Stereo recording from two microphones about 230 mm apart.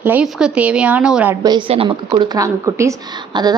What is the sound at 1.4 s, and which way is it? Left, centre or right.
Speech, right.